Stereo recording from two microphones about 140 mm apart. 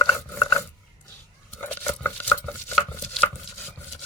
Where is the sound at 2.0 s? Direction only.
15° left (ahead or behind).